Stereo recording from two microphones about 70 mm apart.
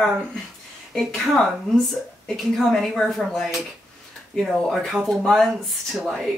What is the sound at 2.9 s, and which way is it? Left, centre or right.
Speech, centre.